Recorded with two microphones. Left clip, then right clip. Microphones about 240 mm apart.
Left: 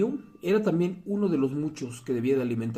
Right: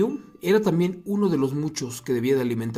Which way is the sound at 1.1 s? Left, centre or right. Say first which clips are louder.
Right 3 dB; right.